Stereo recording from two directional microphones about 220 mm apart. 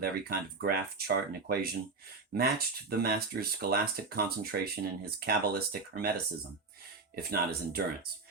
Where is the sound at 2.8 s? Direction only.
45° right (ahead or behind).